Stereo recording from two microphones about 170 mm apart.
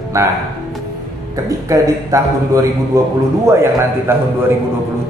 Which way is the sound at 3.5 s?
15° right (ahead or behind).